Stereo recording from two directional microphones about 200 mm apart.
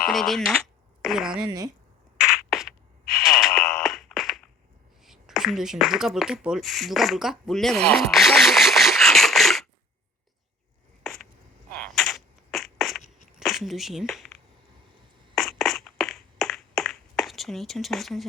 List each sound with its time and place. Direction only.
0.1 s speech: centre (ahead or behind)
1.5 s speech: 20° right (ahead or behind)
2.1 s rodents: 5° right (ahead or behind)
3.2 s sidetone: centre (ahead or behind)
5.0 s speech: centre (ahead or behind)
11.0 s a sound: 5° left (ahead or behind)
13.4 s speech: centre (ahead or behind)
15.4 s a sound: centre (ahead or behind)